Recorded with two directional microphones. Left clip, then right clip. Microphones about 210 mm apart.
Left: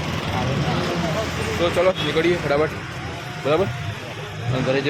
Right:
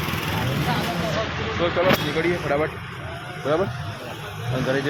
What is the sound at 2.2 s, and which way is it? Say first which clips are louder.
Speech: left 3 dB; 10° left (ahead or behind).